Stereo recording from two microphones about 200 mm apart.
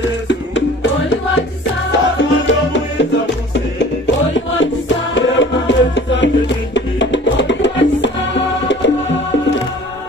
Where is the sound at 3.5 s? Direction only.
60° left (ahead or behind).